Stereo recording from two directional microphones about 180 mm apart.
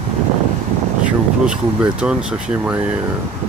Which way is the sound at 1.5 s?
5° right (ahead or behind).